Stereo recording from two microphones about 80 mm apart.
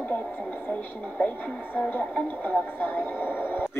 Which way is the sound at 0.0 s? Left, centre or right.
Centre.